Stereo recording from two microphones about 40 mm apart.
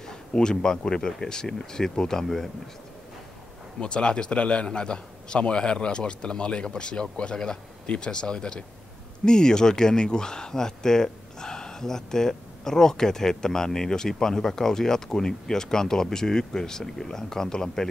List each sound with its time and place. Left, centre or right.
0.0 s speech: centre
3.8 s a man's voice: left